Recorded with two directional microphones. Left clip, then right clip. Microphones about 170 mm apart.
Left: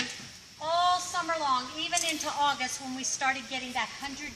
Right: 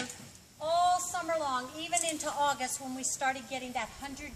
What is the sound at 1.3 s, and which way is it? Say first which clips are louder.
A woman's voice: left 4 dB; 20° right (ahead or behind).